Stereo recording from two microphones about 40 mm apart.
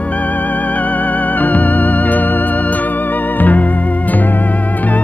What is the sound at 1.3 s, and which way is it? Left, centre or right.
Music, left.